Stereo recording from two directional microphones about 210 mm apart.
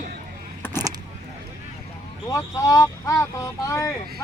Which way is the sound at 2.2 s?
15° left (ahead or behind).